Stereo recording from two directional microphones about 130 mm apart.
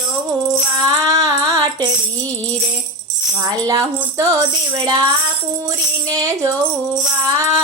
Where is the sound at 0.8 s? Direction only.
25° right (ahead or behind).